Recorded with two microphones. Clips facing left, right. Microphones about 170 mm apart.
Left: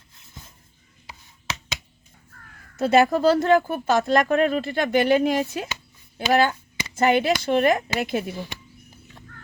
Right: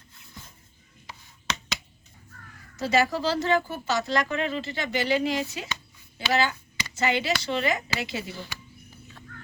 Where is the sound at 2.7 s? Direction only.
55° left (ahead or behind).